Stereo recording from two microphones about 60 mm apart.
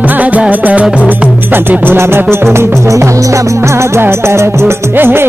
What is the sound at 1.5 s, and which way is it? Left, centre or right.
Music, right.